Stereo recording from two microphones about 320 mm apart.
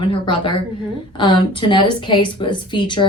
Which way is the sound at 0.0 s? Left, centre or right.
Centre.